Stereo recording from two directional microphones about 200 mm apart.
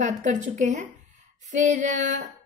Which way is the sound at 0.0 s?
40° right (ahead or behind).